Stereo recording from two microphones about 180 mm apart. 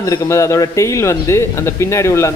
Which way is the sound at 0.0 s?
15° left (ahead or behind).